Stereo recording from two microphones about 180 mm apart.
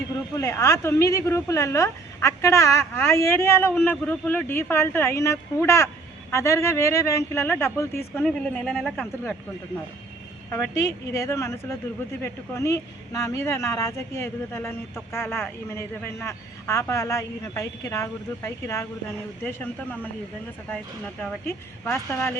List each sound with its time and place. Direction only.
0.3 s speech: 15° left (ahead or behind)
10.5 s speech: 15° left (ahead or behind)